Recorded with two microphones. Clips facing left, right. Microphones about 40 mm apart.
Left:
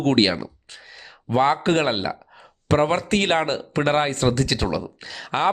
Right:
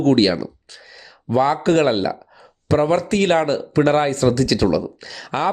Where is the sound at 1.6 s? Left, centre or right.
Centre.